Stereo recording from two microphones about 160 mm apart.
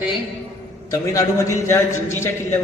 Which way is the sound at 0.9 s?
20° left (ahead or behind).